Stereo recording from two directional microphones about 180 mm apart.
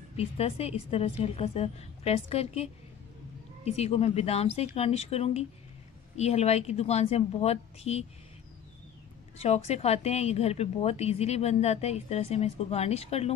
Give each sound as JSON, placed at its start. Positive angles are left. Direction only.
{"t": 0.1, "sound": "a woman's voice", "side_deg": 35}
{"t": 9.4, "sound": "a woman's voice", "side_deg": 35}